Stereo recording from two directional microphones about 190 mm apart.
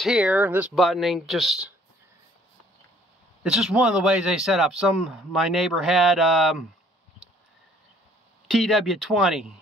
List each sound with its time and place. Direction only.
0.0 s speech: 5° right (ahead or behind)
3.4 s speech: 5° right (ahead or behind)
8.5 s speech: centre (ahead or behind)